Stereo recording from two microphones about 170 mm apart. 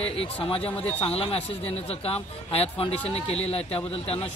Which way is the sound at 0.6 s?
10° left (ahead or behind).